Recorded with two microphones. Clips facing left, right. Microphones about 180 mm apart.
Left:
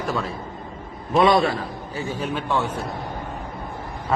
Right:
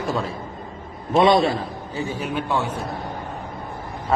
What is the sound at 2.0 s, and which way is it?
Speech, 15° right (ahead or behind).